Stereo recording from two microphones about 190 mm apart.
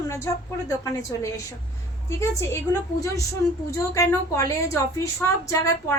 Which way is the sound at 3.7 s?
15° left (ahead or behind).